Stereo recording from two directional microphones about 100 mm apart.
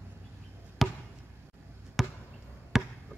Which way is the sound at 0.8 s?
Centre (ahead or behind).